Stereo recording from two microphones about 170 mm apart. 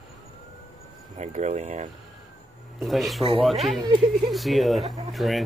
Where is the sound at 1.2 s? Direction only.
45° right (ahead or behind).